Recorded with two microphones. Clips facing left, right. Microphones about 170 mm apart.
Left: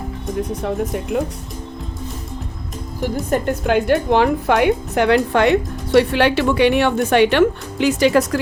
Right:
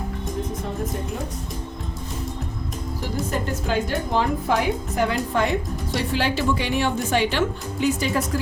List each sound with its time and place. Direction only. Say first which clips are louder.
3.2 s a woman's voice: left 9 dB; 60° left (ahead or behind); by 8.4 s 80° left